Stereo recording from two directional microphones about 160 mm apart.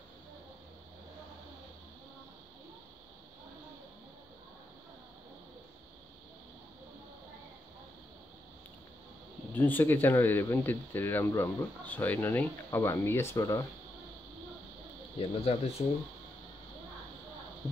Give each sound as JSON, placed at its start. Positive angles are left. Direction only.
{"t": 9.5, "sound": "speech", "side_deg": 10}
{"t": 15.1, "sound": "speech", "side_deg": 35}